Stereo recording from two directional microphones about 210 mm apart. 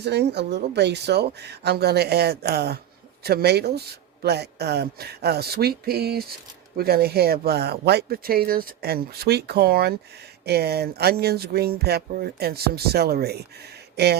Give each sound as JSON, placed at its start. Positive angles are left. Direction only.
{"t": 0.0, "sound": "speech", "side_deg": -50}